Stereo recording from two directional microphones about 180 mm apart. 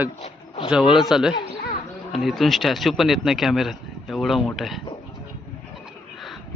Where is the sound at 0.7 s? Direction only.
5° right (ahead or behind).